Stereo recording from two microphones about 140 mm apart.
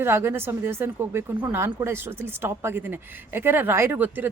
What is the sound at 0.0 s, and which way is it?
Speech, 15° right (ahead or behind).